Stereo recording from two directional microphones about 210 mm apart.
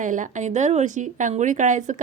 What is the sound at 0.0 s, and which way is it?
A woman's voice, 35° right (ahead or behind).